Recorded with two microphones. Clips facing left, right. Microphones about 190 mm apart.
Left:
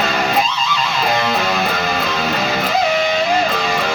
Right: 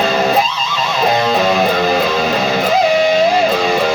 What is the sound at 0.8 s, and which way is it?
Music, 35° right (ahead or behind).